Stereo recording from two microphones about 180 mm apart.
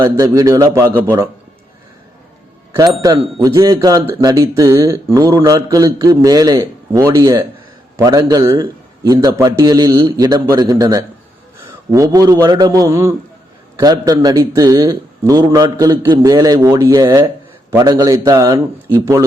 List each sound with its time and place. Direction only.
0.0 s speech: 20° right (ahead or behind)
2.7 s speech: 20° right (ahead or behind)